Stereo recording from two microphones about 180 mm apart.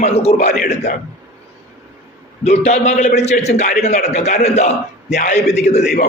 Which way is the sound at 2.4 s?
35° left (ahead or behind).